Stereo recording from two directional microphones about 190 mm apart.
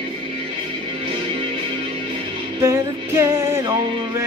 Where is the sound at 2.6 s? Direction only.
15° right (ahead or behind).